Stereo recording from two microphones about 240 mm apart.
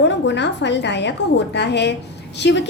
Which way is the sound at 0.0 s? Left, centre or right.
Left.